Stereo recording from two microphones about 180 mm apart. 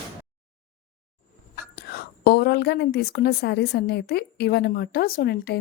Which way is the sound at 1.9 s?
60° left (ahead or behind).